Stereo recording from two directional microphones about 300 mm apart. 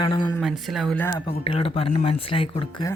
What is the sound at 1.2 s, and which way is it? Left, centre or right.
Speech, centre.